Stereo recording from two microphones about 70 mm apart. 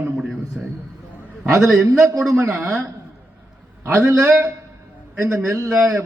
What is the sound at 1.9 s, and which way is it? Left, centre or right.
Speech, right.